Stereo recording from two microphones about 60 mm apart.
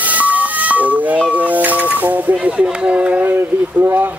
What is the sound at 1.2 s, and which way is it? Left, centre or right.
Music, right.